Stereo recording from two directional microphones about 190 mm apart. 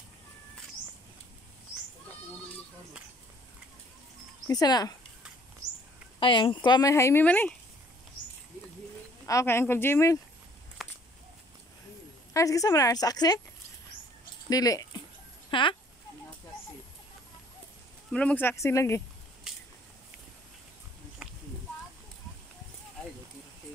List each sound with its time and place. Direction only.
4.5 s speech: 20° left (ahead or behind)
6.1 s speech: 25° left (ahead or behind); by 7.5 s 10° left (ahead or behind)
9.2 s a woman's voice: 15° left (ahead or behind)
10.8 s a sound: centre (ahead or behind)
12.4 s a woman's voice: 15° left (ahead or behind)
14.5 s speech: 20° left (ahead or behind)
18.1 s a woman's voice: 5° left (ahead or behind)
19.5 s a sound: 5° right (ahead or behind)
21.2 s a sound: 5° right (ahead or behind)